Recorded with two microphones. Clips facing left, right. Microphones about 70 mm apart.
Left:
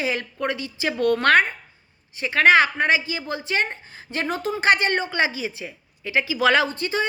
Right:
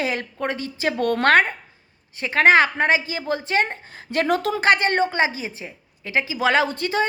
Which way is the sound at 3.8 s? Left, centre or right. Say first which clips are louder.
Right 6 dB; right.